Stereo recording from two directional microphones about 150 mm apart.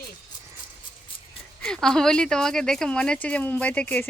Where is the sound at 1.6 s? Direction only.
5° left (ahead or behind).